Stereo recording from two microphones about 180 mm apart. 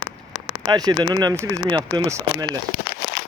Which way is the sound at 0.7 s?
20° right (ahead or behind).